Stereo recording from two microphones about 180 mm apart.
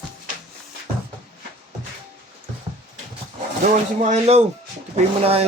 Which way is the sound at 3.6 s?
40° right (ahead or behind).